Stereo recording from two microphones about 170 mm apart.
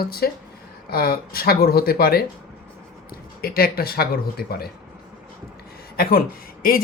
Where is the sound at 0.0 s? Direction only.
65° left (ahead or behind).